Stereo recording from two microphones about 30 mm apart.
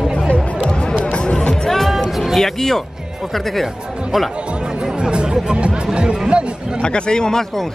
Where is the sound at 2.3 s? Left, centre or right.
Centre.